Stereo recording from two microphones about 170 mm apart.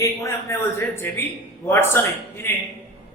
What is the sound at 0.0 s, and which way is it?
A man's voice, 15° left (ahead or behind).